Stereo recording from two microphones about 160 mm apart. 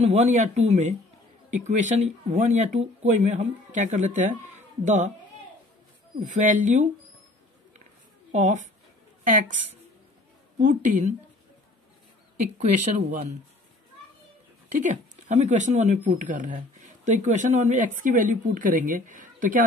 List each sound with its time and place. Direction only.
0.0 s speech: 45° right (ahead or behind)
6.2 s speech: 50° right (ahead or behind)
8.3 s speech: 50° right (ahead or behind)
10.6 s speech: 55° right (ahead or behind)
12.5 s speech: 45° right (ahead or behind)
14.8 s speech: 50° right (ahead or behind)